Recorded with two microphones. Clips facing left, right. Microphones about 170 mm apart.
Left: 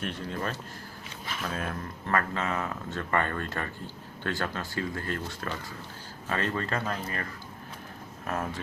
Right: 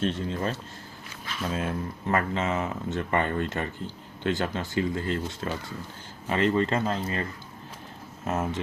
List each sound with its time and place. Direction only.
0.0 s speech: 25° right (ahead or behind)
8.3 s speech: 20° right (ahead or behind)